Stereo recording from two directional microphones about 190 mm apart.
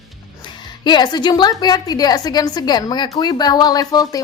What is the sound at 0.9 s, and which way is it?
A woman's voice, 20° left (ahead or behind).